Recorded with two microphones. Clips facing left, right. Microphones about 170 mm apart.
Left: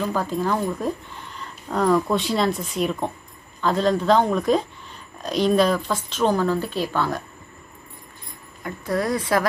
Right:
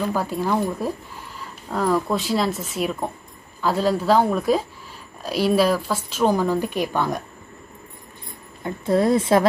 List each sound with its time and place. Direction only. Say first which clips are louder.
0.1 s speech: right 1 dB; 10° right (ahead or behind)
8.6 s speech: right 5 dB; 25° right (ahead or behind)